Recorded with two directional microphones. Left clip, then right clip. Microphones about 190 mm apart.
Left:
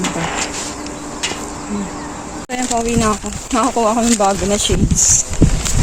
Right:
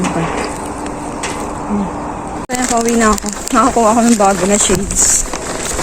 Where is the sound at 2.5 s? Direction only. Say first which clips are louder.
Right 4 dB; 15° left (ahead or behind).